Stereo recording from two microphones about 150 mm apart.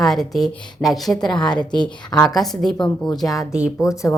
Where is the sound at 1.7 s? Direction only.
25° left (ahead or behind).